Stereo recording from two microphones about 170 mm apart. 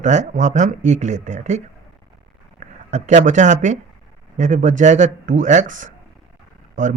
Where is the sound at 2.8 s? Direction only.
45° right (ahead or behind).